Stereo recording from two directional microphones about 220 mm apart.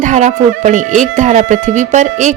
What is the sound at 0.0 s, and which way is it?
Speech, 35° right (ahead or behind).